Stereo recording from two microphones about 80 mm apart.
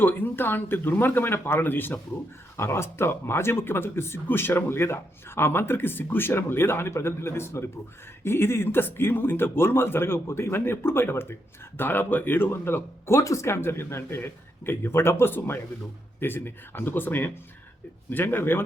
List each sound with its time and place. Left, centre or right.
0.0 s speech: left